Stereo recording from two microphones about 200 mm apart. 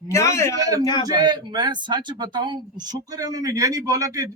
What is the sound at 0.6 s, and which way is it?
Speech, 20° right (ahead or behind).